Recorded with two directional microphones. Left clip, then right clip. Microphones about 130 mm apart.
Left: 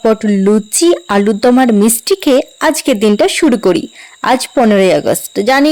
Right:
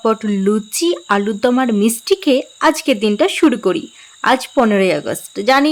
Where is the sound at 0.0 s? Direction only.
25° left (ahead or behind).